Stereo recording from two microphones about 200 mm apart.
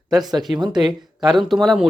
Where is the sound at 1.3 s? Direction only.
Centre (ahead or behind).